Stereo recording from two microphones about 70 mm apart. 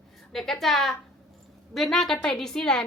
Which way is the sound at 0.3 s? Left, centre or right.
Centre.